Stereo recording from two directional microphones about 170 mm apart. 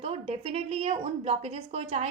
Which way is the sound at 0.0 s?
35° right (ahead or behind).